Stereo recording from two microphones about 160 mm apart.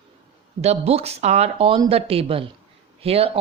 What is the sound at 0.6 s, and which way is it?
A woman's voice, 40° right (ahead or behind).